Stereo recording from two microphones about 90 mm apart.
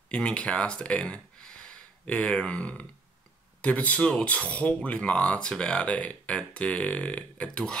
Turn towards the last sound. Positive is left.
turn(degrees=10)  # may be behind; listen again after turning